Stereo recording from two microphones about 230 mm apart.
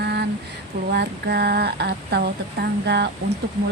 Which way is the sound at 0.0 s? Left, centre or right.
Right.